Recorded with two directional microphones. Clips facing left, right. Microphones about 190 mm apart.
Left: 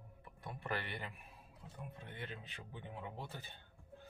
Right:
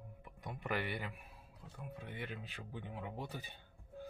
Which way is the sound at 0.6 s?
10° right (ahead or behind).